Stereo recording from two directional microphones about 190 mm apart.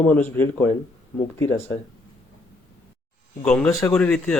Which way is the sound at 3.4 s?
5° left (ahead or behind).